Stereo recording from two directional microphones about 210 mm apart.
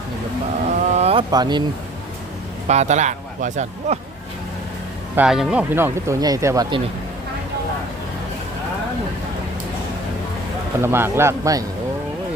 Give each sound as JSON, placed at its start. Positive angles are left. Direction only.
{"t": 0.8, "sound": "boat", "side_deg": -30}
{"t": 1.3, "sound": "speech", "side_deg": -20}
{"t": 2.6, "sound": "a man's voice", "side_deg": -35}
{"t": 5.1, "sound": "speech", "side_deg": -5}
{"t": 10.8, "sound": "speech", "side_deg": -10}